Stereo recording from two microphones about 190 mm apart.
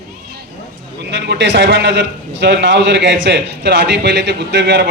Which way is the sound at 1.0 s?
65° right (ahead or behind).